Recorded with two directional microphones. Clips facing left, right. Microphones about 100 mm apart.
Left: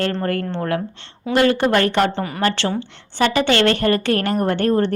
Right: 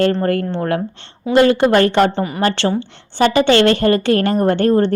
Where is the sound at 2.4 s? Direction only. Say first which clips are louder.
Right 3 dB; 25° right (ahead or behind).